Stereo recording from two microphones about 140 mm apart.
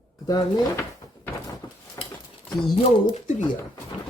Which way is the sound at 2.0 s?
25° left (ahead or behind).